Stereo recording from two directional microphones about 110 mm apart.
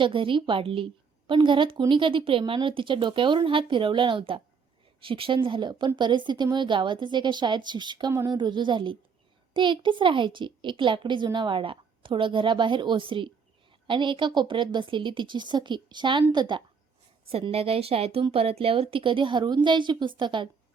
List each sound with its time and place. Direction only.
0.0 s a child's voice: 50° right (ahead or behind)
17.2 s a woman's voice: 60° right (ahead or behind)